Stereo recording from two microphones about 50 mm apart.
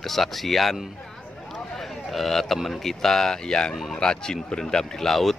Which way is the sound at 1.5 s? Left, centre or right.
Centre.